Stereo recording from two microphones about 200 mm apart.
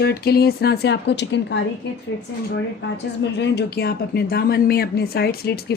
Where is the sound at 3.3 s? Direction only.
60° left (ahead or behind).